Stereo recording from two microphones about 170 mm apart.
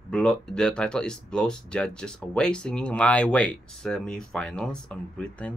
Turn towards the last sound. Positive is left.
turn(degrees=10)  # may be behind; listen again after turning